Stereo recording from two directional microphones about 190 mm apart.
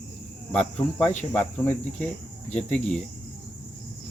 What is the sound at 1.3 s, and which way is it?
Speech, 5° left (ahead or behind).